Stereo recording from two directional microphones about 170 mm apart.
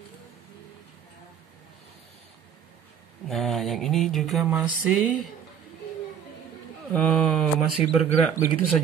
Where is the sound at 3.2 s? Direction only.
Centre (ahead or behind).